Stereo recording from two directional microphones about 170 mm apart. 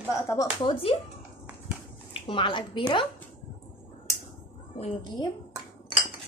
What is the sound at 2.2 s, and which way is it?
Speech, 30° left (ahead or behind).